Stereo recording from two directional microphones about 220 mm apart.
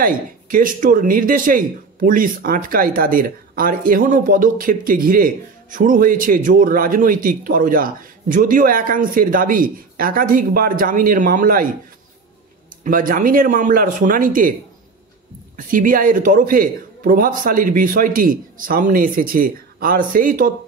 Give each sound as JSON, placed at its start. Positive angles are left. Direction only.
{"t": 0.0, "sound": "speech", "side_deg": -40}
{"t": 12.8, "sound": "speech", "side_deg": -40}
{"t": 15.5, "sound": "speech", "side_deg": -40}